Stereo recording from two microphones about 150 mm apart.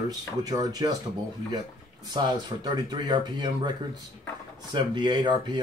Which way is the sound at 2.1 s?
30° right (ahead or behind).